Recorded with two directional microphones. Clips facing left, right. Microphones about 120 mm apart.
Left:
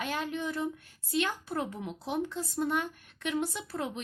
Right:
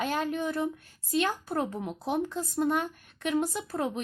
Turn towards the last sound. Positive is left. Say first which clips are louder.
# right 4 dB
turn(degrees=-45)  # may be behind; listen again after turning